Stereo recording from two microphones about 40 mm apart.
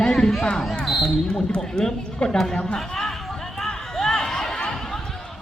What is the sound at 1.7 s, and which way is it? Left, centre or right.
A man's voice, centre.